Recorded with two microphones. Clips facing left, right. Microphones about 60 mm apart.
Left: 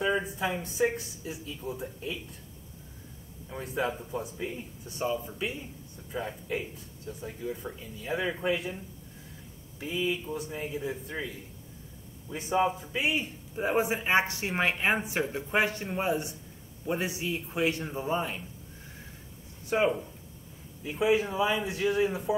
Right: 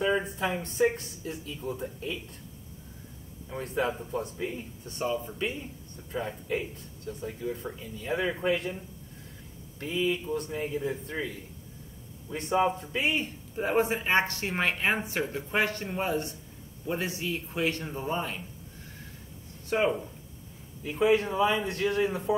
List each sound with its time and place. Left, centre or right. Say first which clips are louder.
0.0 s speech: right 1 dB; centre
3.4 s a woman's voice: right 2 dB; centre
19.7 s speech: even; centre